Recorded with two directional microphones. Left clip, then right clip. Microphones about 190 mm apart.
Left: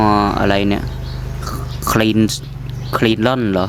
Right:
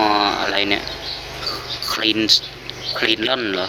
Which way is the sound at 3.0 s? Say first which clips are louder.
Left 2 dB; 25° left (ahead or behind).